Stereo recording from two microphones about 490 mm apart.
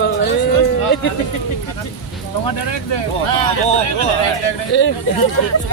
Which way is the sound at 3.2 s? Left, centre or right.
Left.